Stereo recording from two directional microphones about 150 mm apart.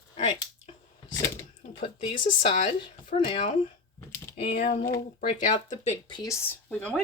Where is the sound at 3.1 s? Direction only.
60° left (ahead or behind).